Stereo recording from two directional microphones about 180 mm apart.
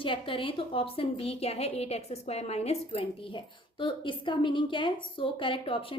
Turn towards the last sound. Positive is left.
turn(degrees=30)  # may be behind; listen again after turning